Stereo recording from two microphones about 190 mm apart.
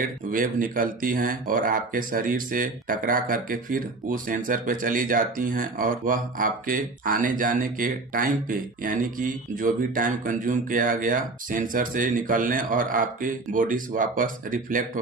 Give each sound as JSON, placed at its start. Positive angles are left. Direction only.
{"t": 0.3, "sound": "speech", "side_deg": -45}